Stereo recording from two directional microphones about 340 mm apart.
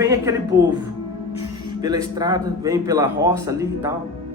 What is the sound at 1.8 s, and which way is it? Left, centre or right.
Speech, centre.